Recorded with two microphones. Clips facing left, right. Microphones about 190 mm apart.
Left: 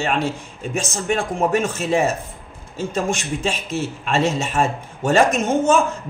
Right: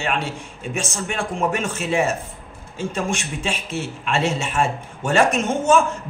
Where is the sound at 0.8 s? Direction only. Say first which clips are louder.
Left 4 dB; 40° left (ahead or behind).